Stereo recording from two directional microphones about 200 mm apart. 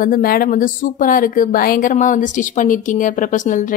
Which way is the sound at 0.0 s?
45° left (ahead or behind).